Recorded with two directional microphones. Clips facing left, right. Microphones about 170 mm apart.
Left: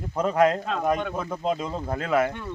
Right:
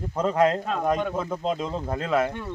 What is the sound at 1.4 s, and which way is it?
Speech, 10° left (ahead or behind).